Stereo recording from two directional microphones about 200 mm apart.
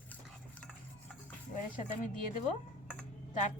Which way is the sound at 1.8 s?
40° left (ahead or behind).